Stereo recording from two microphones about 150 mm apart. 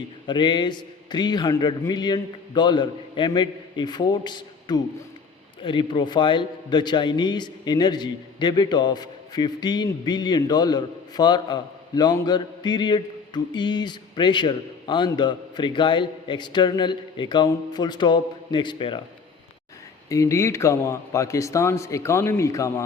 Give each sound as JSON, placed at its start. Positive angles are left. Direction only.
{"t": 0.3, "sound": "a man's voice", "side_deg": 30}
{"t": 20.1, "sound": "a man's voice", "side_deg": 20}